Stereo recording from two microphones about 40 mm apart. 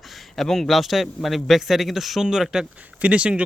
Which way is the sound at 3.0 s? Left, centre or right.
Right.